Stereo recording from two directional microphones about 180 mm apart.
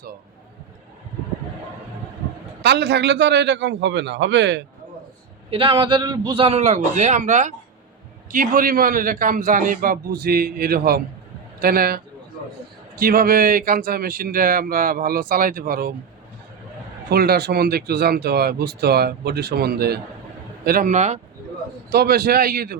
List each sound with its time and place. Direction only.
2.6 s a man's voice: 70° right (ahead or behind)
5.5 s a man's voice: 30° right (ahead or behind); by 15.9 s 55° right (ahead or behind)
17.1 s speech: 60° right (ahead or behind)
20.7 s speech: 50° right (ahead or behind)
21.8 s speech: 60° right (ahead or behind)